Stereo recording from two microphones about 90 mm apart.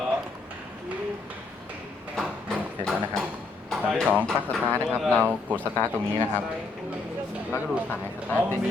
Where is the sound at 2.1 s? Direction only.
5° left (ahead or behind).